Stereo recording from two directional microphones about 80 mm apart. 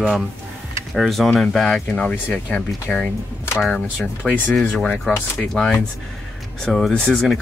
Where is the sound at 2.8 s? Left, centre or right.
Centre.